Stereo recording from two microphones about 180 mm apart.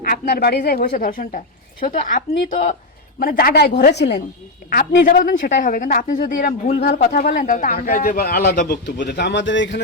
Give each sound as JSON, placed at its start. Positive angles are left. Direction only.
{"t": 0.0, "sound": "a man's voice", "side_deg": 55}
{"t": 4.7, "sound": "a man's voice", "side_deg": 55}